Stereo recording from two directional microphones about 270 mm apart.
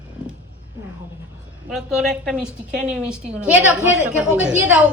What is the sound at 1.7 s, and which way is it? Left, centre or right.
Speech, centre.